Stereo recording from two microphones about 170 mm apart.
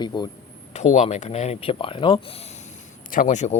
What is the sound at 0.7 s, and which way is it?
Speech, 40° left (ahead or behind).